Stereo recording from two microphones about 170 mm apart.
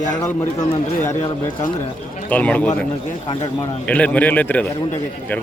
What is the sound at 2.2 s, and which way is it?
A man's voice, 10° left (ahead or behind).